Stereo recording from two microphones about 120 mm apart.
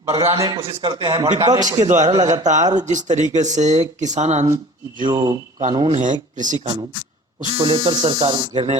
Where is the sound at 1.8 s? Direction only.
85° right.